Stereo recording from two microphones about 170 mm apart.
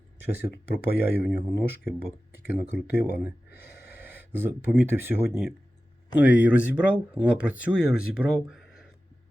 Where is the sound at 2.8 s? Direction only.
70° left (ahead or behind).